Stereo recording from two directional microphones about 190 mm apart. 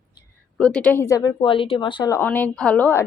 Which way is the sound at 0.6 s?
5° left (ahead or behind).